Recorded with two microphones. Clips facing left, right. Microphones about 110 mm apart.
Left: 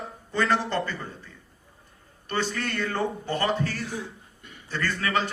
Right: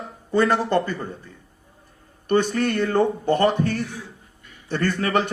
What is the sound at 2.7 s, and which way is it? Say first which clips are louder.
Speech: right 9 dB; 20° right (ahead or behind).